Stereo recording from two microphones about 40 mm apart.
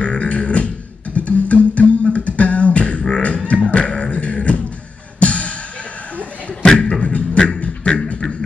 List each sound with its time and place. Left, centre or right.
0.0 s beatboxing: left
1.1 s music: left
2.0 s beatboxing: left
3.4 s music: left
6.6 s beatboxing: centre
7.0 s beatboxing: left